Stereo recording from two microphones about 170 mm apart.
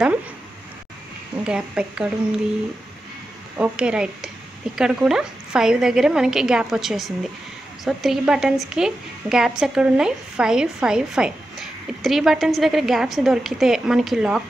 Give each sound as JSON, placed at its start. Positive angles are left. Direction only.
{"t": 1.4, "sound": "a woman's voice", "side_deg": -5}
{"t": 3.5, "sound": "a woman's voice", "side_deg": -5}